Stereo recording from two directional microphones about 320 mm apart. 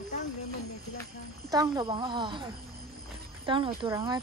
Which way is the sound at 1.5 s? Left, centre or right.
Centre.